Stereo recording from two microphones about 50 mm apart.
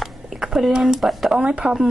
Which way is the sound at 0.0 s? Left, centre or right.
Centre.